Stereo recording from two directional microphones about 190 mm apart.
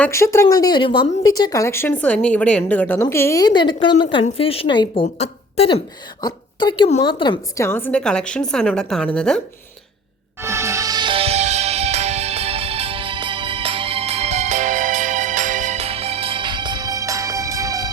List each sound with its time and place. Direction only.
0.0 s a woman's voice: 15° left (ahead or behind)
10.4 s music: 15° right (ahead or behind)